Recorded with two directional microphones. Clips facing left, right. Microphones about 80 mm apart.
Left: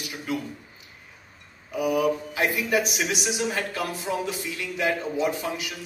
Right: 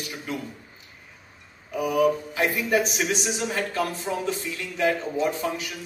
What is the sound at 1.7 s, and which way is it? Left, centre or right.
Speech, right.